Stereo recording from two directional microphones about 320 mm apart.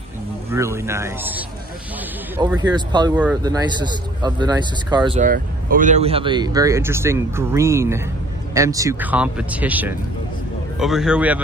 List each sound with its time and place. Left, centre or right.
0.5 s speech: centre